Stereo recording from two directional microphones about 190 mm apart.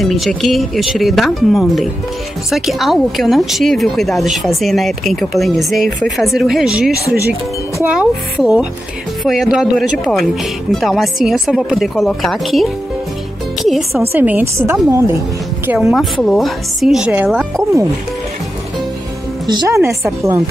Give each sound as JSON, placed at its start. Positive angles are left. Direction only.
{"t": 0.0, "sound": "a woman's voice", "side_deg": 0}
{"t": 19.4, "sound": "a woman's voice", "side_deg": -20}